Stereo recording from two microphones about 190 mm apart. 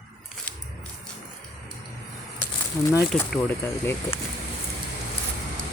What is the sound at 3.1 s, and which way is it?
Speech, 5° left (ahead or behind).